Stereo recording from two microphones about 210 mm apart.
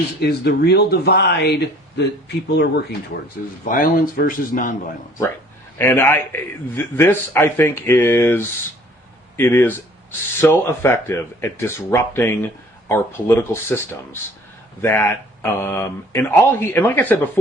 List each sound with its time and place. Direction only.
0.2 s speech: 50° left (ahead or behind)
5.7 s speech: 10° left (ahead or behind)